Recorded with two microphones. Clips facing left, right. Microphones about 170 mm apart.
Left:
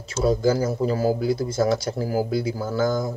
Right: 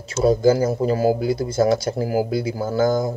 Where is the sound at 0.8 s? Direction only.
60° right (ahead or behind).